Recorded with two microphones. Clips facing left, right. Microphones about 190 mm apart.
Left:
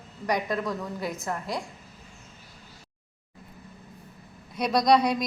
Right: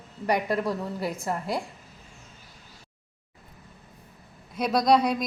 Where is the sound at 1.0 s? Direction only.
30° right (ahead or behind).